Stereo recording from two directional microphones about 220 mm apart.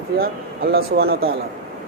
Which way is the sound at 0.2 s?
45° right (ahead or behind).